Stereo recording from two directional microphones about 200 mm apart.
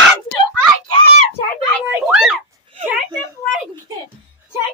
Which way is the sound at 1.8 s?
5° right (ahead or behind).